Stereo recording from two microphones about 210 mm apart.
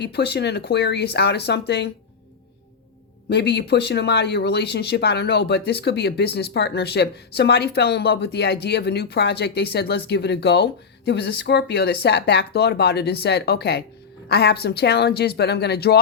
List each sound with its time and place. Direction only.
0.0 s speech: 50° left (ahead or behind)
3.2 s speech: 50° left (ahead or behind)